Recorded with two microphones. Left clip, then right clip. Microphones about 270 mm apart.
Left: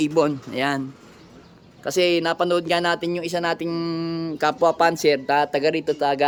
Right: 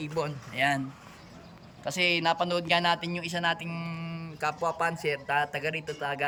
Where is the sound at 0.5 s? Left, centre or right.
Centre.